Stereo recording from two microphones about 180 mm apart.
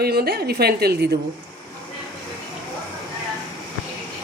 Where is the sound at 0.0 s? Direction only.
60° right (ahead or behind).